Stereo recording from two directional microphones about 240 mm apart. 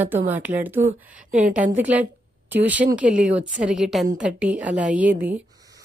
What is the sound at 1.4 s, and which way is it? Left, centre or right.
Speech, right.